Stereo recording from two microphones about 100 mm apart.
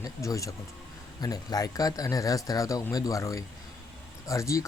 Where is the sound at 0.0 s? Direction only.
35° left (ahead or behind).